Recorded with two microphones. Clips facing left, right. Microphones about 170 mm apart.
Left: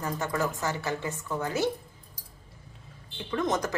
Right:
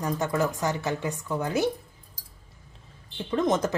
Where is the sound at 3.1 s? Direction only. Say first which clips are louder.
Right 4 dB; 25° right (ahead or behind).